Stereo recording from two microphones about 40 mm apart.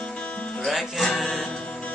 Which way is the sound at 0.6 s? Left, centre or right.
Centre.